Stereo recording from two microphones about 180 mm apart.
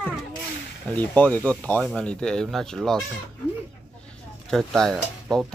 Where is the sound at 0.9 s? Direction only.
10° left (ahead or behind).